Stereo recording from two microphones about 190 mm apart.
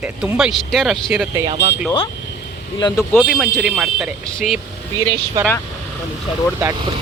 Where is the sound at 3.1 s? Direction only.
Centre (ahead or behind).